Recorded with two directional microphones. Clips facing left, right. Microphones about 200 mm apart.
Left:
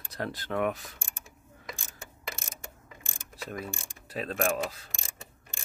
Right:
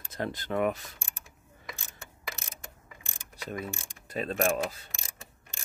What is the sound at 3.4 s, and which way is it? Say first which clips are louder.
Pulleys: right 1 dB; centre (ahead or behind).